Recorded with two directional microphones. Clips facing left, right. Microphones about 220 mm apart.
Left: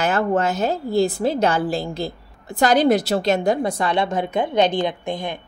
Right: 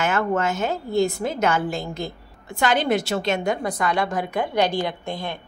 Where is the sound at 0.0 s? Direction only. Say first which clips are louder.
Left 3 dB; 35° left (ahead or behind); by 5.4 s 20° left (ahead or behind).